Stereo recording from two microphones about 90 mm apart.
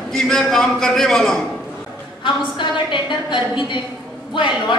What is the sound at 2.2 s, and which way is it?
A woman's voice, 60° left (ahead or behind).